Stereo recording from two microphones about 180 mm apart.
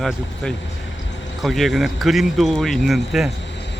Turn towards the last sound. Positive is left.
turn(degrees=0)  # may be behind; listen again after turning